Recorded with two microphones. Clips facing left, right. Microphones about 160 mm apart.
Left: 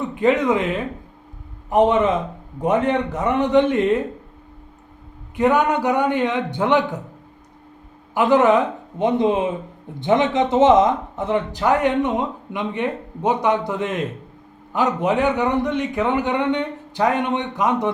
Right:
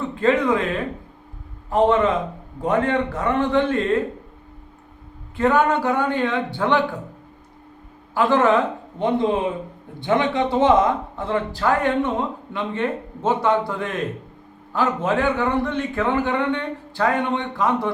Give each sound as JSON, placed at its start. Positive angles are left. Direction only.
{"t": 0.0, "sound": "speech", "side_deg": 15}
{"t": 5.4, "sound": "a man's voice", "side_deg": 15}
{"t": 8.1, "sound": "a man's voice", "side_deg": 20}